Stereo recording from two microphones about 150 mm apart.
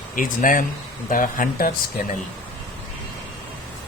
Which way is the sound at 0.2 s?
65° left (ahead or behind).